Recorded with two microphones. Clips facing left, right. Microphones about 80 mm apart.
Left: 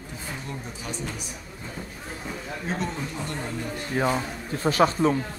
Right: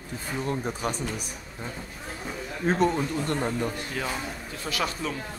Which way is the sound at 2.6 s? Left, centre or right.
Right.